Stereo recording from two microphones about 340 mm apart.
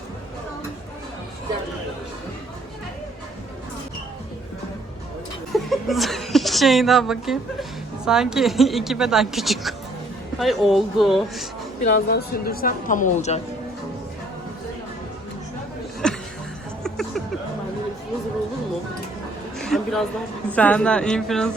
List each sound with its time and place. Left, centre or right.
5.5 s chuckle: centre
8.0 s speech: centre
11.8 s speech: left
16.0 s music: centre
16.8 s a sound: centre
19.5 s a sound: centre
20.5 s speech: centre